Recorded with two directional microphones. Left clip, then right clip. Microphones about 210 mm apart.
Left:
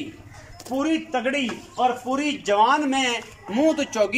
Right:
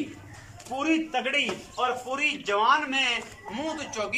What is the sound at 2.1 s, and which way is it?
A man's voice, 25° left (ahead or behind).